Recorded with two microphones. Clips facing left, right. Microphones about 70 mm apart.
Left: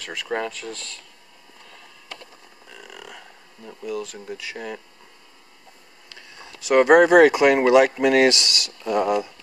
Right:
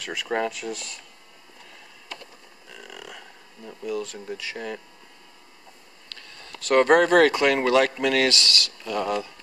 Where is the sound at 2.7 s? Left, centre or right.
Centre.